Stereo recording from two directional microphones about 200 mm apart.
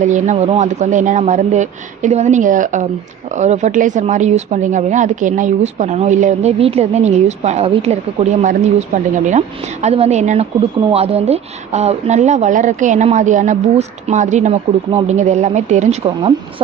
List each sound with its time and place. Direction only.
0.0 s speech: 35° right (ahead or behind)